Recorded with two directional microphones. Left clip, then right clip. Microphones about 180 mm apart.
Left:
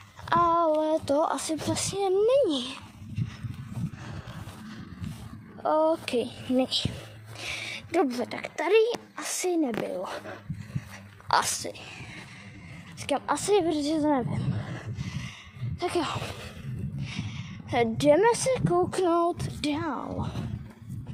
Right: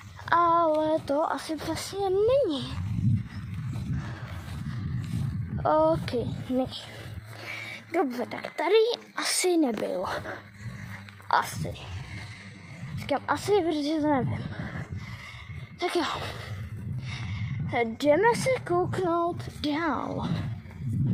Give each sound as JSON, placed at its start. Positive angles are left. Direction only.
{"t": 0.3, "sound": "child singing", "side_deg": 5}
{"t": 1.0, "sound": "speech", "side_deg": 10}
{"t": 5.6, "sound": "a woman's voice", "side_deg": -5}
{"t": 6.1, "sound": "speech", "side_deg": 15}
{"t": 7.4, "sound": "a sound", "side_deg": 15}
{"t": 8.1, "sound": "speech", "side_deg": 5}
{"t": 9.1, "sound": "a woman's voice", "side_deg": -10}
{"t": 11.3, "sound": "speech", "side_deg": 15}
{"t": 13.0, "sound": "speech", "side_deg": 5}
{"t": 15.8, "sound": "speech", "side_deg": 0}
{"t": 17.0, "sound": "a sound", "side_deg": 5}
{"t": 17.7, "sound": "speech", "side_deg": 15}
{"t": 18.9, "sound": "a sound", "side_deg": 20}
{"t": 19.8, "sound": "a woman's voice", "side_deg": -10}